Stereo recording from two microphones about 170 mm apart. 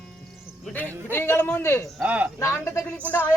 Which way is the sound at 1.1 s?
15° left (ahead or behind).